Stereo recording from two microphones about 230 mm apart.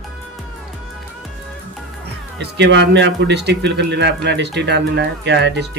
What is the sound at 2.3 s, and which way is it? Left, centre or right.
Speech, right.